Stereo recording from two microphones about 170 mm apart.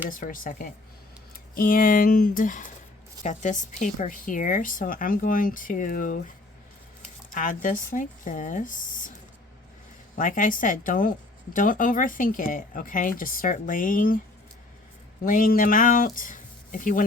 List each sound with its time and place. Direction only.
0.1 s speech: 55° left (ahead or behind)
7.3 s speech: 50° left (ahead or behind)
10.2 s speech: 50° left (ahead or behind)
15.2 s speech: 55° left (ahead or behind)